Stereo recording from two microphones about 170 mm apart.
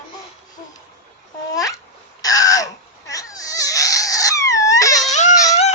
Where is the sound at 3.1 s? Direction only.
20° left (ahead or behind).